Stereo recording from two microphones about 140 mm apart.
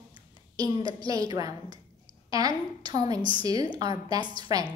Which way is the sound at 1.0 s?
25° right (ahead or behind).